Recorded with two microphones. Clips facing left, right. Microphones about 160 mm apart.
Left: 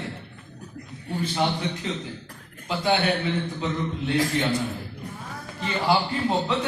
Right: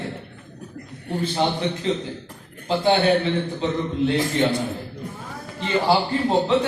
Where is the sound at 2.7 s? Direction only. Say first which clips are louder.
Right 5 dB; 30° right (ahead or behind).